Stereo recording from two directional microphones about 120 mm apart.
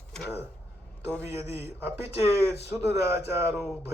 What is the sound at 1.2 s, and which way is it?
A man's voice, 20° right (ahead or behind).